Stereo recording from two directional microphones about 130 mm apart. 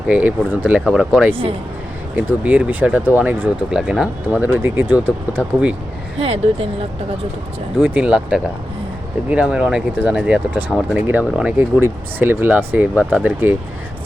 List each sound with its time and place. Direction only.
0.1 s speech: 10° right (ahead or behind)
6.1 s speech: 50° right (ahead or behind)
7.8 s speech: 10° right (ahead or behind)